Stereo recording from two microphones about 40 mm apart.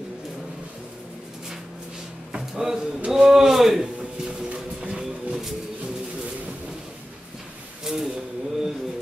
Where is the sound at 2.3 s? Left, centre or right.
Centre.